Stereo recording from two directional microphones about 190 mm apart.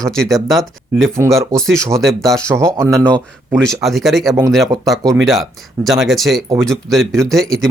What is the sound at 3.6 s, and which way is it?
Speech, centre (ahead or behind).